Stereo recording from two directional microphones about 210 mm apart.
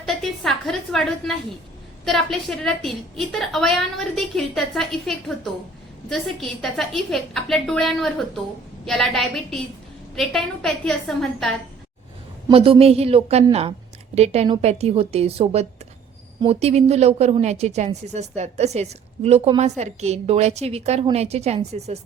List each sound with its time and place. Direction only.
0.0 s a sound: centre (ahead or behind)
2.0 s a woman's voice: centre (ahead or behind)
12.5 s a woman's voice: 25° right (ahead or behind)